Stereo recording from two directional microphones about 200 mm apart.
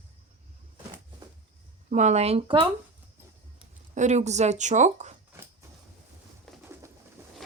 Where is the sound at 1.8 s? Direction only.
35° right (ahead or behind).